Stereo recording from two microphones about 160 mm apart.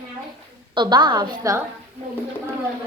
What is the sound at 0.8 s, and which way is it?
Speech, 30° right (ahead or behind).